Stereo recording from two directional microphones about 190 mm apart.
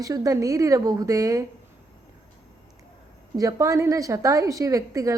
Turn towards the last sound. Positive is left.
turn(degrees=-15)  # may be behind; listen again after turning